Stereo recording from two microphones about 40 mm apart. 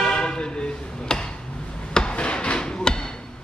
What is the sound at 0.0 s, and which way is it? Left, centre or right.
Toot, left.